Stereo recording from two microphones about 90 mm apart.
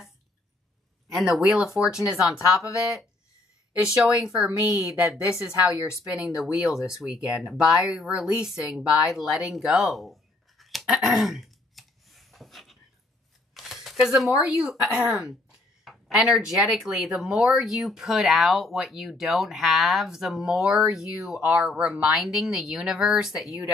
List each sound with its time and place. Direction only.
1.1 s speech: 5° right (ahead or behind)
3.8 s speech: 10° right (ahead or behind)
4.6 s a woman's voice: 45° left (ahead or behind)
6.0 s speech: 5° right (ahead or behind)